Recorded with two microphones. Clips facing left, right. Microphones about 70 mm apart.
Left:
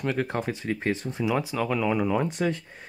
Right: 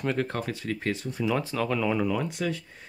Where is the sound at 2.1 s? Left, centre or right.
Left.